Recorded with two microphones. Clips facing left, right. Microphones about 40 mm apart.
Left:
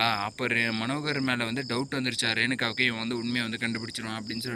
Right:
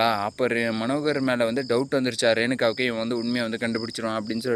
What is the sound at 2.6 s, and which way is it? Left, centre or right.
Speech, left.